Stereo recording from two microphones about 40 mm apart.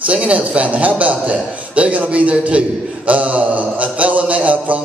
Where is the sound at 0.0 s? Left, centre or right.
Right.